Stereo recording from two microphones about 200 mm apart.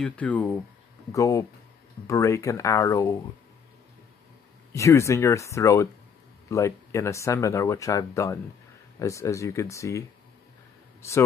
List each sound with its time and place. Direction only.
0.0 s speech: 5° left (ahead or behind)
4.7 s speech: 15° left (ahead or behind)